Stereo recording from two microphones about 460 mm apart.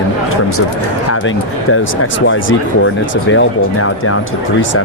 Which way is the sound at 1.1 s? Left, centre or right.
Left.